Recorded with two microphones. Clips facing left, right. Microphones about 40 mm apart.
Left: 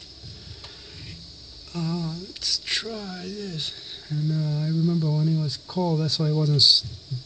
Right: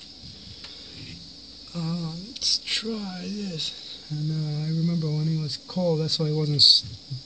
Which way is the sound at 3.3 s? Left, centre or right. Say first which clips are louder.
Even; left.